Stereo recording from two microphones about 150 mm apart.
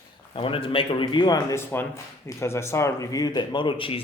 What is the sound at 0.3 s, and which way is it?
A man's voice, 35° left (ahead or behind).